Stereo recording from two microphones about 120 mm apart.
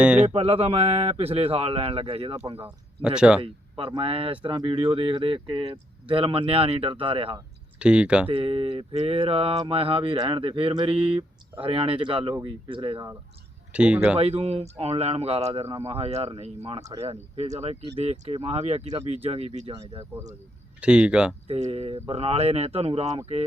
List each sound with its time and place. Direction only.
0.0 s a sound: 10° right (ahead or behind)
0.3 s speech: 55° right (ahead or behind)
2.6 s speech: 10° right (ahead or behind)
3.4 s speech: 45° right (ahead or behind)
7.8 s speech: 10° right (ahead or behind)
8.3 s speech: 50° right (ahead or behind); by 12.5 s 35° right (ahead or behind)
12.6 s speech: 45° right (ahead or behind)
13.7 s speech: 10° right (ahead or behind)
14.2 s speech: 55° right (ahead or behind)
20.8 s speech: 10° right (ahead or behind)
21.4 s speech: 55° right (ahead or behind)